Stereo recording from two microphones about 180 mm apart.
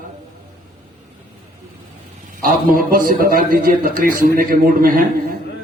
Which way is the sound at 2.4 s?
50° right (ahead or behind).